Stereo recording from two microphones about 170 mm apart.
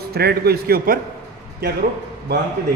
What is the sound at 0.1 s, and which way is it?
Speech, 70° right (ahead or behind).